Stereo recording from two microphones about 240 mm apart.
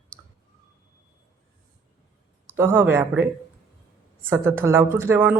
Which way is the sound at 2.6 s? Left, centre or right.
Centre.